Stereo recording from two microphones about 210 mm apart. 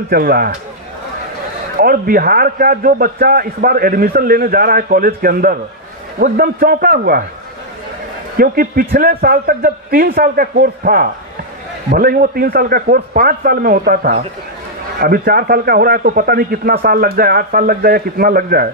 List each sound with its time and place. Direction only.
0.1 s a man's voice: 45° right (ahead or behind)
1.8 s a man's voice: 45° right (ahead or behind)
8.4 s a man's voice: 45° right (ahead or behind)